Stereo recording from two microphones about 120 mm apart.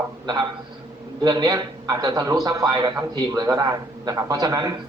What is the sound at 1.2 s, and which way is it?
A woman's voice, 35° right (ahead or behind).